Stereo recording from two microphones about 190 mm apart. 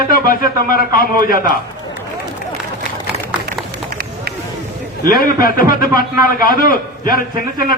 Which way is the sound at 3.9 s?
50° right (ahead or behind).